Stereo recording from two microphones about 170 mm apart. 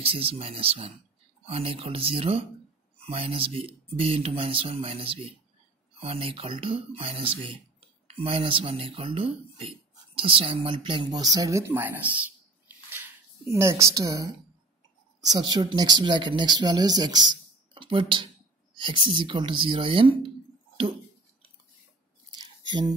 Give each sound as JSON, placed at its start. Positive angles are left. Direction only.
{"t": 0.0, "sound": "speech", "side_deg": -35}
{"t": 13.5, "sound": "a woman's voice", "side_deg": -15}
{"t": 22.3, "sound": "squish", "side_deg": -25}